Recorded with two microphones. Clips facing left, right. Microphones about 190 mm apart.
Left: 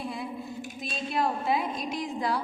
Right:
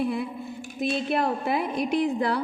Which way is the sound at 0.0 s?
60° right (ahead or behind).